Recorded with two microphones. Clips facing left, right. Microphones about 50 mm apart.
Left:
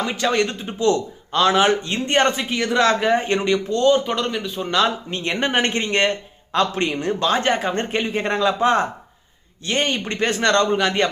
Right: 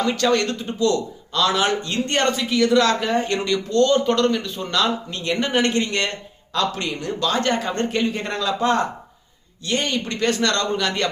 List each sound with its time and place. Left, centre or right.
0.0 s a man's voice: centre
4.7 s a man's voice: left